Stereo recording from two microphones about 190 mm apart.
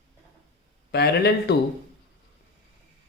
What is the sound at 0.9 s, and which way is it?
Speech, 60° left (ahead or behind).